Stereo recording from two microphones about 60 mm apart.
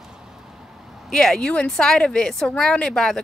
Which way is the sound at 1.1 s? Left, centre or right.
Centre.